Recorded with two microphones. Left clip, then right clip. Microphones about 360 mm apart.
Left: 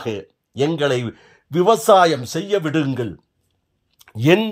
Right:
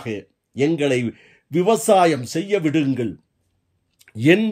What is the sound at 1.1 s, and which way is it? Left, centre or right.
Speech, left.